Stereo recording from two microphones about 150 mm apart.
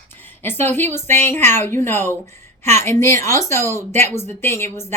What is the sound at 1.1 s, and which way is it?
A woman's voice, 15° left (ahead or behind).